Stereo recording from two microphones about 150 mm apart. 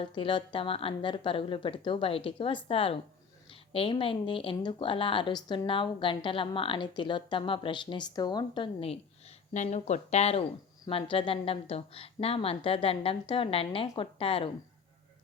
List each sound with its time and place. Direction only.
0.0 s a woman's voice: 35° left (ahead or behind)
9.5 s a woman's voice: 50° left (ahead or behind)